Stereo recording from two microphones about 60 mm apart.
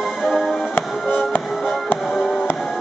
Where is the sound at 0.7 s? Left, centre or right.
Left.